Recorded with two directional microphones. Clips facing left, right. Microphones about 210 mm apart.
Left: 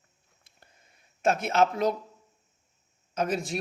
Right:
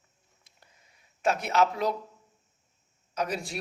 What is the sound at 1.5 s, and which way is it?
Speech, 50° left (ahead or behind).